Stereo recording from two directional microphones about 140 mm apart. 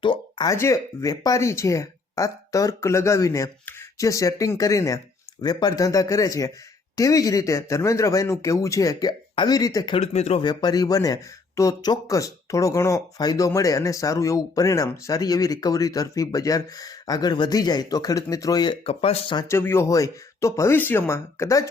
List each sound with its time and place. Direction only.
0.0 s a sound: 35° left (ahead or behind)
0.5 s speech: 20° left (ahead or behind)
9.9 s speech: 50° left (ahead or behind)
10.4 s speech: 30° left (ahead or behind)
19.4 s speech: 20° left (ahead or behind)